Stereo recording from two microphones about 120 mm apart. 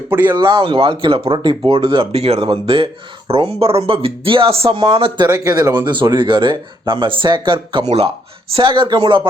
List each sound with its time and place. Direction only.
0.1 s speech: 15° right (ahead or behind)
0.3 s speech: 40° right (ahead or behind)
5.4 s speech: 30° right (ahead or behind)
5.9 s speech: 40° right (ahead or behind)
7.9 s speech: 55° right (ahead or behind)
8.5 s speech: 45° right (ahead or behind)